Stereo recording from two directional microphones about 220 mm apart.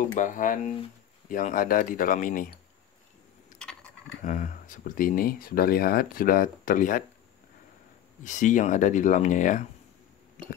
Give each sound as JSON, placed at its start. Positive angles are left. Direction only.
{"t": 0.1, "sound": "speech", "side_deg": 35}
{"t": 3.6, "sound": "keys jangling", "side_deg": 5}
{"t": 4.2, "sound": "speech", "side_deg": 35}
{"t": 8.2, "sound": "speech", "side_deg": 35}